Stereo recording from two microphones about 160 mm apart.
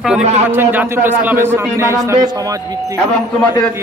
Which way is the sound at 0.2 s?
45° right (ahead or behind).